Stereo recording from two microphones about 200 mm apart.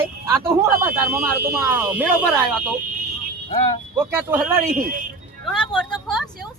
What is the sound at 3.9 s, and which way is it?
Speech, 10° right (ahead or behind).